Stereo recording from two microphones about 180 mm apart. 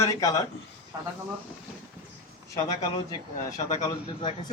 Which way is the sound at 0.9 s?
15° right (ahead or behind).